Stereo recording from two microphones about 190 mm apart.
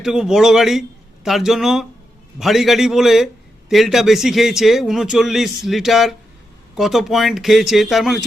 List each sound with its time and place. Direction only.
0.0 s a man's voice: 5° right (ahead or behind)